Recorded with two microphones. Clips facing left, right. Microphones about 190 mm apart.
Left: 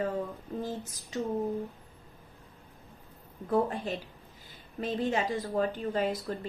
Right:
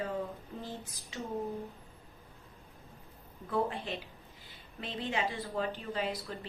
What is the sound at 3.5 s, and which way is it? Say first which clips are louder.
A woman's voice: left 5 dB; 45° left (ahead or behind).